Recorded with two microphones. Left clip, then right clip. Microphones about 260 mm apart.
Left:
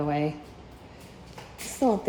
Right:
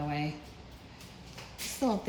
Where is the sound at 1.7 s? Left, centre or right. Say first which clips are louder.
Left 7 dB; centre.